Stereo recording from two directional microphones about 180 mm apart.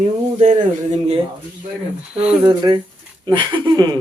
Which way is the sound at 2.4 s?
25° right (ahead or behind).